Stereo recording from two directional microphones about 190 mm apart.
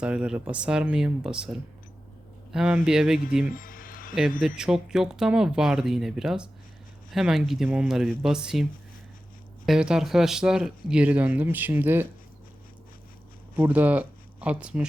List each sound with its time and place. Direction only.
0.0 s speech: 5° right (ahead or behind)
3.5 s music: 45° left (ahead or behind)
4.4 s speech: 5° right (ahead or behind)
9.6 s speech: 5° right (ahead or behind)
13.6 s speech: 10° right (ahead or behind)